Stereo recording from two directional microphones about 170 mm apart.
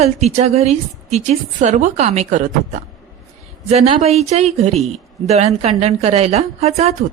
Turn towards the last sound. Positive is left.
turn(degrees=-40)  # may be behind; listen again after turning